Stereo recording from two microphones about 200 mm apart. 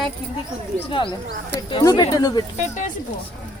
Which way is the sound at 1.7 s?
20° left (ahead or behind).